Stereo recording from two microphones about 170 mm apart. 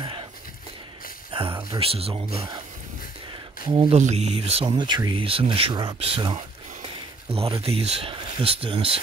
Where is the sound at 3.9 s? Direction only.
40° right (ahead or behind).